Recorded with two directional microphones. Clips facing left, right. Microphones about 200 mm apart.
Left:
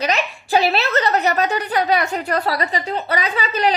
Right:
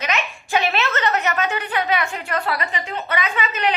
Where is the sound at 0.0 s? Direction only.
35° left (ahead or behind).